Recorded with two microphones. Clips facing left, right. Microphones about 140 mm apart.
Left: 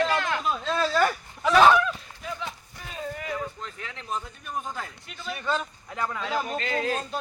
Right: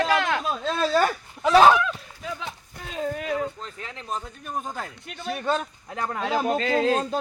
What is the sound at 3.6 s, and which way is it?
Speech, 35° right (ahead or behind).